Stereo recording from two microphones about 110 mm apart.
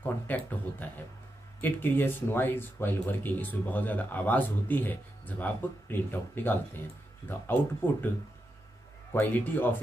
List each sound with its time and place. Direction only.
0.0 s speech: 15° left (ahead or behind)
9.1 s speech: 20° left (ahead or behind)